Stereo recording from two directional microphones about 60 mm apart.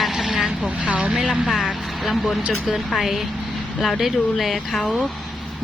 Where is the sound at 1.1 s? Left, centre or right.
Centre.